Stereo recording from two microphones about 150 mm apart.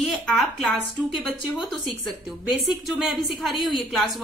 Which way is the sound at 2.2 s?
Centre (ahead or behind).